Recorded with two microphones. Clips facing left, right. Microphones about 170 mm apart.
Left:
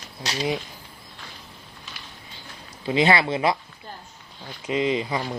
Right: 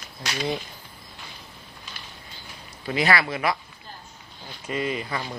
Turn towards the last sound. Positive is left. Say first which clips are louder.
# left 4 dB
turn(degrees=20)  # may be behind; listen again after turning